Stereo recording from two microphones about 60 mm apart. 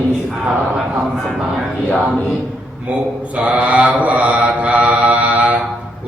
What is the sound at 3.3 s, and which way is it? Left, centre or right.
Mantra, right.